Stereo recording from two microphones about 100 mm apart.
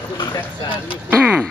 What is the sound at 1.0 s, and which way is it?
Speech, 15° right (ahead or behind).